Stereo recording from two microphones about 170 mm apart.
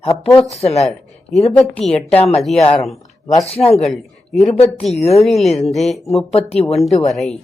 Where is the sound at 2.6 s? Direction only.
35° left (ahead or behind).